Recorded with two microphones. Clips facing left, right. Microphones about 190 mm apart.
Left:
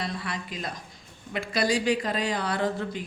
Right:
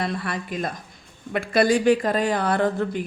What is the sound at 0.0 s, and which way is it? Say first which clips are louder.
Speech: right 6 dB; 55° right (ahead or behind).